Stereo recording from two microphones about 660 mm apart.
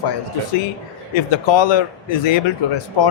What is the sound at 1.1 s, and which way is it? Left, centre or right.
A man's voice, left.